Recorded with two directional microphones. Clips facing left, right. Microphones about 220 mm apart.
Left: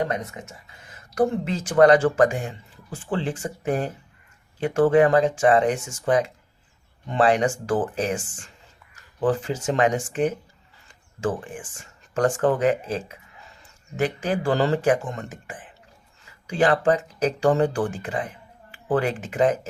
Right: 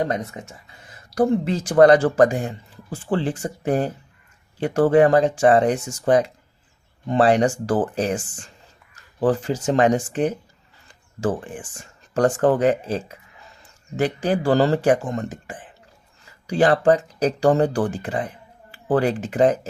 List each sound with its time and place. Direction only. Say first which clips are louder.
1.1 s speech: right 3 dB; 35° right (ahead or behind)
9.2 s speech: right 3 dB; 35° right (ahead or behind)
12.1 s speech: right 3 dB; 35° right (ahead or behind)